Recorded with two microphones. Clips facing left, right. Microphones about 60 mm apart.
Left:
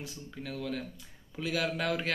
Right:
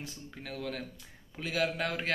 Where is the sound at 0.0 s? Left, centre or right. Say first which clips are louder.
Left 2 dB; right.